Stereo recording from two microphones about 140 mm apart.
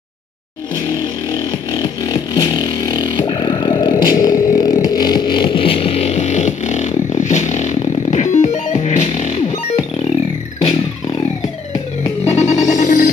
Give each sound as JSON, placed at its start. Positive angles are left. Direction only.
{"t": 1.7, "sound": "music", "side_deg": 30}
{"t": 12.4, "sound": "music", "side_deg": 55}